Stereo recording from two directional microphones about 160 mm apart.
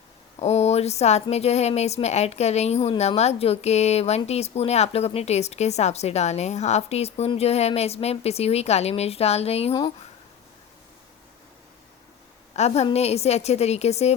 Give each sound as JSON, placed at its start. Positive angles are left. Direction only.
{"t": 0.3, "sound": "a woman's voice", "side_deg": 40}
{"t": 12.5, "sound": "a woman's voice", "side_deg": 40}